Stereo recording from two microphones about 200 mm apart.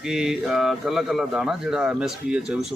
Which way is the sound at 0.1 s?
Centre (ahead or behind).